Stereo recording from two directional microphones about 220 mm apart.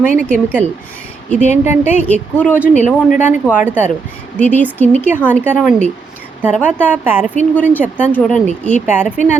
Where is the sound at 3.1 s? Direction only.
35° left (ahead or behind).